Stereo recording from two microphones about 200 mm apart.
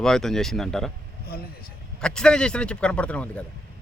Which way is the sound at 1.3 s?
50° left (ahead or behind).